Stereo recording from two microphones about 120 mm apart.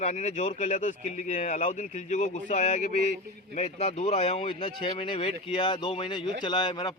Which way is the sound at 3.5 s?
65° left (ahead or behind).